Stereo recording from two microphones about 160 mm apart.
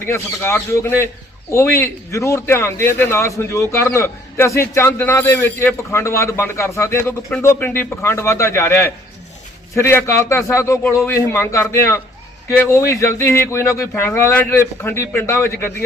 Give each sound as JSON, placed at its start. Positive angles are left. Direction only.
{"t": 0.0, "sound": "a man's voice", "side_deg": 15}